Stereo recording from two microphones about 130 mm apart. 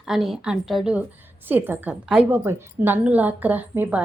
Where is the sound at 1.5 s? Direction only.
15° right (ahead or behind).